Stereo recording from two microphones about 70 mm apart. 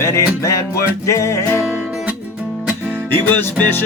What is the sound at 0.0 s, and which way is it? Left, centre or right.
Music, left.